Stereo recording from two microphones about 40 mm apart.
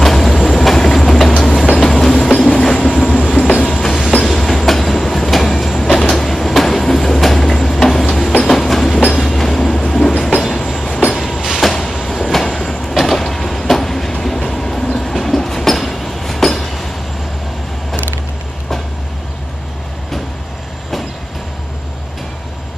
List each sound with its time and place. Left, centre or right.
0.0 s vehicle: centre
0.4 s train: centre